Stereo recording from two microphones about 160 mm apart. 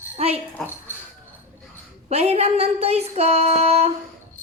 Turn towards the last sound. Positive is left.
turn(degrees=-40)  # may be behind; listen again after turning